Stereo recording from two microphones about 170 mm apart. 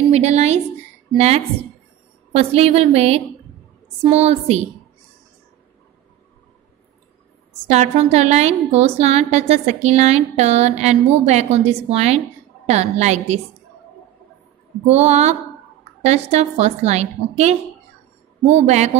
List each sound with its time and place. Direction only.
0.1 s a woman's voice: 40° right (ahead or behind)
7.7 s a woman's voice: 40° right (ahead or behind)
14.9 s a woman's voice: 40° right (ahead or behind)